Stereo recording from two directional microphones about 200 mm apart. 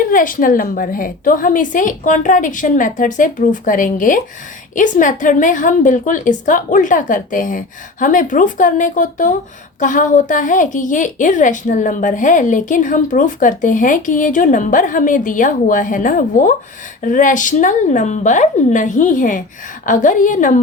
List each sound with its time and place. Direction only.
0.1 s a woman's voice: 45° left (ahead or behind)